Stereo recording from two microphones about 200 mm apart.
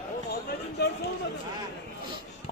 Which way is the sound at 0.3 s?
50° left (ahead or behind).